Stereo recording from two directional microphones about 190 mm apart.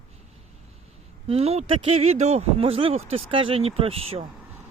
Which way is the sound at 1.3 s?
30° right (ahead or behind).